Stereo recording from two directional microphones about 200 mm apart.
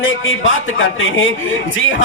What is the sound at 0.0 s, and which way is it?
A man's voice, 80° left.